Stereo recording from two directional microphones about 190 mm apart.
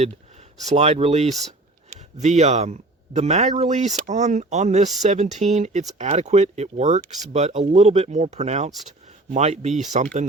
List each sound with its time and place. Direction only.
0.7 s speech: 35° right (ahead or behind)